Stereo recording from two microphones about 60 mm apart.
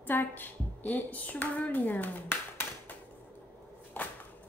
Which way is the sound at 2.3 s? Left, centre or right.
Left.